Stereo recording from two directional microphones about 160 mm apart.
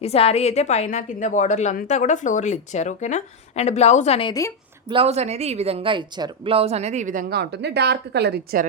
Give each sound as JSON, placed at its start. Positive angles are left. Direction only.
{"t": 0.0, "sound": "a woman's voice", "side_deg": 40}
{"t": 4.9, "sound": "speech", "side_deg": -35}